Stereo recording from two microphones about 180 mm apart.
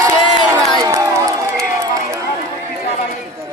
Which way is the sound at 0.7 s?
20° right (ahead or behind).